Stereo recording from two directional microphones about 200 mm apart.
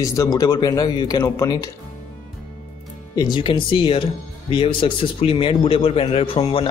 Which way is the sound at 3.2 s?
25° left (ahead or behind).